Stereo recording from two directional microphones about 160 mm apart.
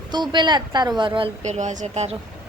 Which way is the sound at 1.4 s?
45° right (ahead or behind).